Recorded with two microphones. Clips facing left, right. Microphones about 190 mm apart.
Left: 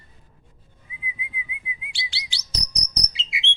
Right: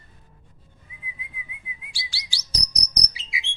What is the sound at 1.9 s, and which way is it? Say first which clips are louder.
Chirp: left 3 dB; 20° left (ahead or behind).